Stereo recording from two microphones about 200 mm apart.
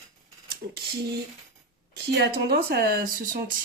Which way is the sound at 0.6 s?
60° right (ahead or behind).